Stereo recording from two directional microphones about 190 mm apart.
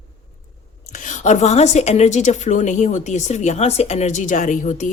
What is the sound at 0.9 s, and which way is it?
A woman's voice, 40° left (ahead or behind).